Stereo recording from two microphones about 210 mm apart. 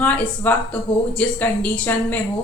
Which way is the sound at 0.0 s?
5° left (ahead or behind).